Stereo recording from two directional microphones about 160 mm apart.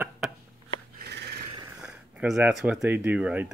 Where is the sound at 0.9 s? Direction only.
90° right.